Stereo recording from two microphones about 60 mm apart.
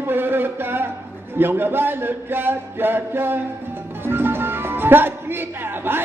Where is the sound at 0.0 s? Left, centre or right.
Right.